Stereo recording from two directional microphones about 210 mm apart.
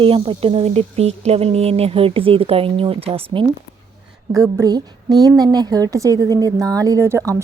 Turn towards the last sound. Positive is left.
turn(degrees=-15)  # may be behind; listen again after turning